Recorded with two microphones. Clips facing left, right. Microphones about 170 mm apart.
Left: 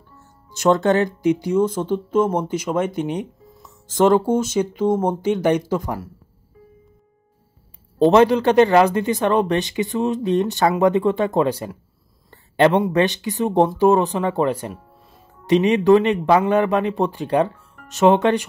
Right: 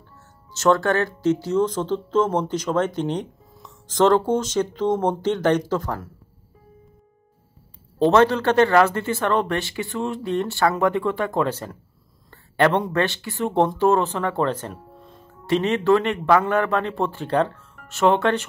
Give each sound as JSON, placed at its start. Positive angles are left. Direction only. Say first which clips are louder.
{"t": 0.5, "sound": "a man's voice", "louder": "left 2 dB", "side_deg": 15}
{"t": 8.0, "sound": "a man's voice", "louder": "left 3 dB", "side_deg": 15}
{"t": 12.3, "sound": "a sound", "louder": "left 3 dB", "side_deg": 15}
{"t": 12.9, "sound": "a man's voice", "louder": "left 4 dB", "side_deg": 15}